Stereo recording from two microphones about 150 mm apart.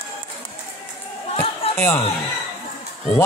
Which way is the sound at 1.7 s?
15° left (ahead or behind).